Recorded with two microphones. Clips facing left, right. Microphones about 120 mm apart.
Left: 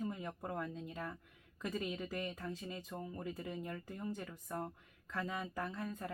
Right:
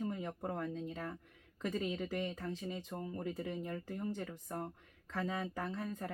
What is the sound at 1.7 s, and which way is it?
Speech, 25° right (ahead or behind).